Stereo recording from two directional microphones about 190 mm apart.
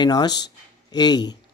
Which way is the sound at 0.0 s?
20° left (ahead or behind).